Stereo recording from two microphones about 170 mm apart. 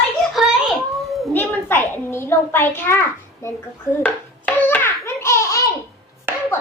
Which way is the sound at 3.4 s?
15° left (ahead or behind).